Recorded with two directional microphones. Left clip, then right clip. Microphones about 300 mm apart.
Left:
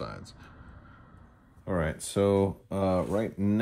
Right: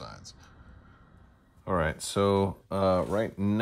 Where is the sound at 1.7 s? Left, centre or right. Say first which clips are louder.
Right 3 dB; right.